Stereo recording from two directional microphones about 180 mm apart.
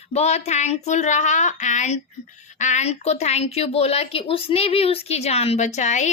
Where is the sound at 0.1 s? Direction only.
35° left (ahead or behind).